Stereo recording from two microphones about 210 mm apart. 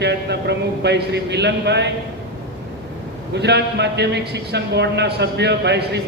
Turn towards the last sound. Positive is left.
turn(degrees=-55)  # may be behind; listen again after turning